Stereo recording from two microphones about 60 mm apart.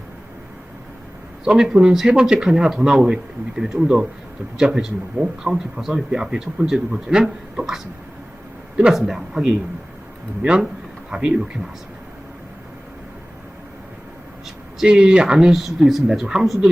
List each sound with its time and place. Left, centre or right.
1.5 s speech: centre
8.9 s speech: centre
14.8 s speech: centre